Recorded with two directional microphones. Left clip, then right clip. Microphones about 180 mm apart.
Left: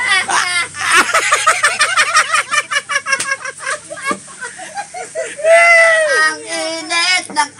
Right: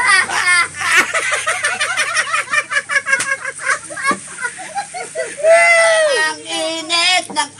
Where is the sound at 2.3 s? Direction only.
10° left (ahead or behind).